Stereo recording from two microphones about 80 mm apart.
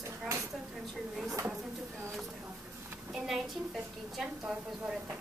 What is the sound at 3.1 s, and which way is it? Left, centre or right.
A woman's voice, centre.